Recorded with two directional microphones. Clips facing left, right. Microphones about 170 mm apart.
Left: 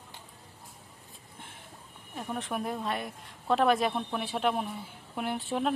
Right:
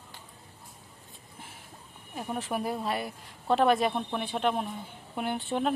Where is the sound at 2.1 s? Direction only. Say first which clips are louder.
Right 2 dB; 5° right (ahead or behind).